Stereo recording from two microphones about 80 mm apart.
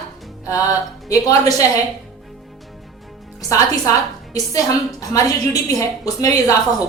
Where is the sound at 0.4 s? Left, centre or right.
Left.